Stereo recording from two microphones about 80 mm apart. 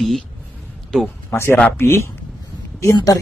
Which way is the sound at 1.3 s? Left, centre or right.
Left.